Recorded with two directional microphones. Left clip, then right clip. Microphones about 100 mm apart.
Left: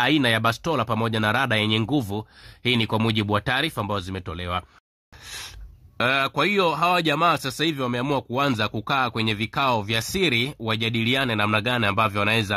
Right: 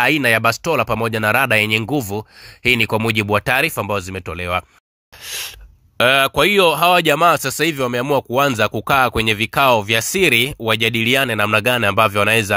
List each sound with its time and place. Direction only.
0.0 s speech: 20° right (ahead or behind)